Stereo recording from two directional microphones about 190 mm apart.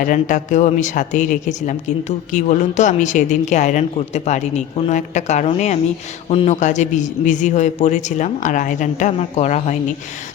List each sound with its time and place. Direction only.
0.0 s a woman's voice: 45° left (ahead or behind)